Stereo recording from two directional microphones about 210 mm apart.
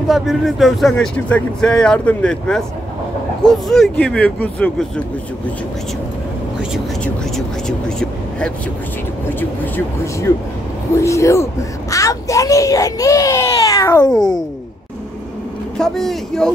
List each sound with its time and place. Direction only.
0.1 s speech: centre (ahead or behind)
7.3 s a child's voice: 5° left (ahead or behind)
15.8 s speech: centre (ahead or behind)